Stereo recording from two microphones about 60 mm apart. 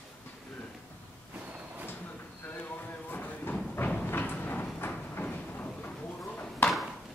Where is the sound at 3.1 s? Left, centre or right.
Left.